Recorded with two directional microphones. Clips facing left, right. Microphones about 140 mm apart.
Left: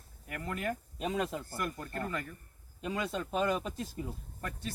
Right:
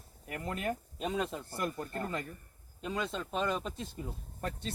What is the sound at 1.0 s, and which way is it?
Speech, centre (ahead or behind).